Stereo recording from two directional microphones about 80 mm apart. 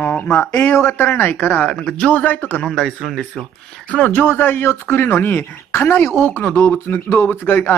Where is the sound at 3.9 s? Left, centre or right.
Centre.